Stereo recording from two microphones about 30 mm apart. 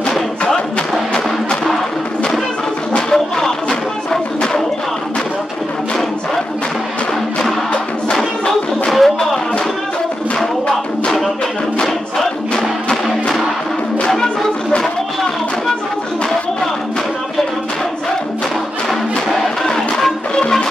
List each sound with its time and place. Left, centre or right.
0.1 s music: centre
2.9 s music: centre
8.9 s music: centre
11.8 s music: centre
19.2 s music: centre